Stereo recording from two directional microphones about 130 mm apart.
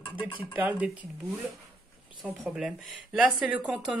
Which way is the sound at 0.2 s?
40° left (ahead or behind).